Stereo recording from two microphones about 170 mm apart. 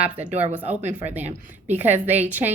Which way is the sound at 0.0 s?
10° right (ahead or behind).